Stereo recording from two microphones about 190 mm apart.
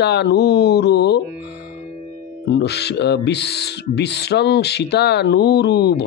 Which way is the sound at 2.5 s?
60° left (ahead or behind).